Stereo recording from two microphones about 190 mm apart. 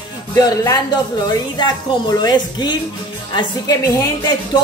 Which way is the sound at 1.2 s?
20° left (ahead or behind).